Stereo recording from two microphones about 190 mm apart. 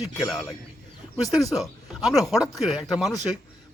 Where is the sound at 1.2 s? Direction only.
20° left (ahead or behind).